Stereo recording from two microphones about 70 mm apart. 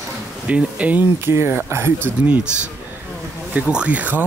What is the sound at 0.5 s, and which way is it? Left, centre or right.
Speech, centre.